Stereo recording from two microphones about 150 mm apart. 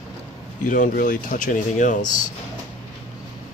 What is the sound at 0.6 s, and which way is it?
Speech, 65° left (ahead or behind).